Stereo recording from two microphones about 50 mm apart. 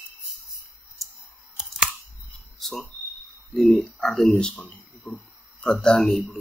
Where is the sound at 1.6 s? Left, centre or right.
Centre.